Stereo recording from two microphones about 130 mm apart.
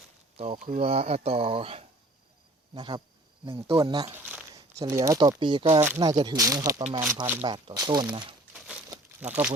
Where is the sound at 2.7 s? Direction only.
35° right (ahead or behind).